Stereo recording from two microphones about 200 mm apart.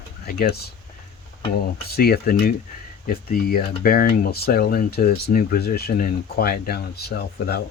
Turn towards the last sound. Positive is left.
turn(degrees=55)  # may be behind; listen again after turning